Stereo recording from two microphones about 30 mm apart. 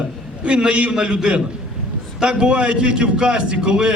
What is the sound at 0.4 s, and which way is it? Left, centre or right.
A man's voice, right.